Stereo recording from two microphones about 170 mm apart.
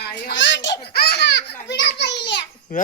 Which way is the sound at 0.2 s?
80° left.